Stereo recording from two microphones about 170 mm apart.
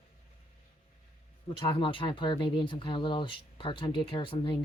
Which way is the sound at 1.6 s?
30° left (ahead or behind).